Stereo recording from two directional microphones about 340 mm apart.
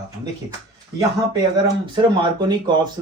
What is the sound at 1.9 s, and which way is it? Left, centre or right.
Speech, centre.